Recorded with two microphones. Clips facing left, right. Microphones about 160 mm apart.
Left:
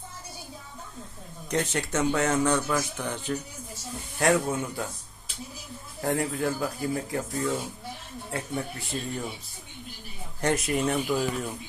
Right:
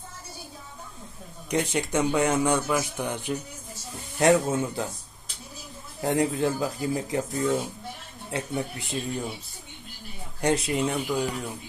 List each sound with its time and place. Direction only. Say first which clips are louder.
1.5 s speech: right 2 dB; 15° right (ahead or behind)
6.0 s speech: right 3 dB; 20° right (ahead or behind)
8.3 s speech: right 2 dB; 20° right (ahead or behind)
10.4 s speech: right 1 dB; 15° right (ahead or behind)